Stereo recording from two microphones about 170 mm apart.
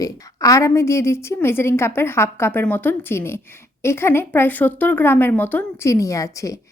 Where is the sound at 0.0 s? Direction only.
20° left (ahead or behind).